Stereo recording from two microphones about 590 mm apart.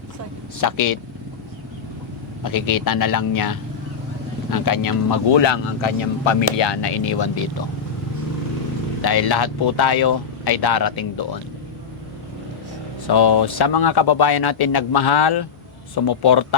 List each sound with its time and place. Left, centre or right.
0.6 s speech: left
2.4 s speech: left
9.0 s speech: left
13.1 s speech: left